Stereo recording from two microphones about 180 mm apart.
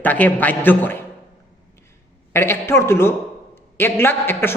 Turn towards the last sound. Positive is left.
turn(degrees=10)  # may be behind; listen again after turning